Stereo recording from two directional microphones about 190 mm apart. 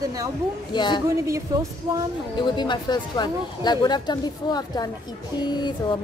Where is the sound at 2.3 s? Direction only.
25° left (ahead or behind).